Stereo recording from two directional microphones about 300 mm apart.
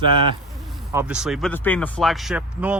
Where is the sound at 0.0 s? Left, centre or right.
Centre.